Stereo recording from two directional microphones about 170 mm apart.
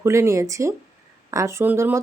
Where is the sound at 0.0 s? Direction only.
15° right (ahead or behind).